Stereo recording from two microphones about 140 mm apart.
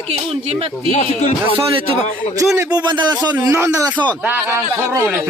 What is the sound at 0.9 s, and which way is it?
Speech, 50° left (ahead or behind).